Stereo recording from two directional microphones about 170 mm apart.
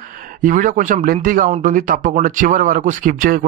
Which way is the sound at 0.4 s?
50° right (ahead or behind).